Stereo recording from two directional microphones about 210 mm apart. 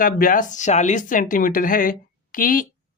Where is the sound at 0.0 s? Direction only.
40° left (ahead or behind).